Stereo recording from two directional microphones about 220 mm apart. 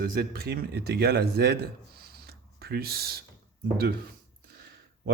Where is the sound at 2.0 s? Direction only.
45° right (ahead or behind).